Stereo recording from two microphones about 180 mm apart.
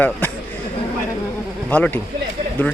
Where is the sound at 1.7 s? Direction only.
10° left (ahead or behind).